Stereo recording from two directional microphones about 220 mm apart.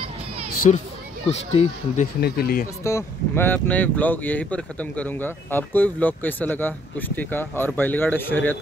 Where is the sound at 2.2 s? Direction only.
40° left (ahead or behind).